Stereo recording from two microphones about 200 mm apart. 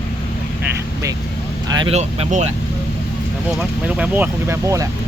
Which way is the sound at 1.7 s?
30° right (ahead or behind).